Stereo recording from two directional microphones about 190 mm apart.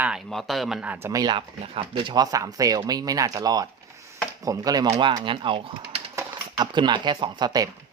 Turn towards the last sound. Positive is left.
turn(degrees=-20)  # may be behind; listen again after turning